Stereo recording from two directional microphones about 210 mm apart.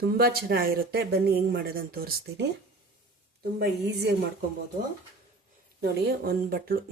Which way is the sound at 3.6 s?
50° right (ahead or behind).